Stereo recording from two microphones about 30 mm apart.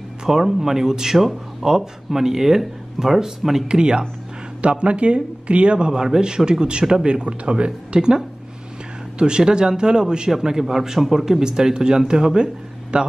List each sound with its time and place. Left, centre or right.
0.3 s speech: centre
2.0 s speech: centre
3.6 s speech: right
6.2 s speech: right
9.2 s speech: right
12.9 s speech: right